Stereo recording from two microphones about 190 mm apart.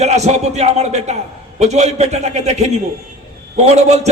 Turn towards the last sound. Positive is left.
turn(degrees=-35)  # may be behind; listen again after turning